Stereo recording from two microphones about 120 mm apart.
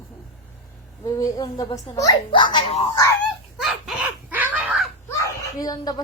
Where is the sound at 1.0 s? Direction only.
30° left (ahead or behind).